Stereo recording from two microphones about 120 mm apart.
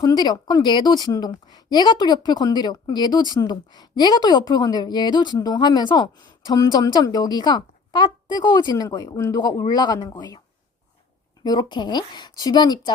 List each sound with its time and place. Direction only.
0.0 s a woman's voice: 35° left (ahead or behind)
11.4 s a woman's voice: 35° left (ahead or behind)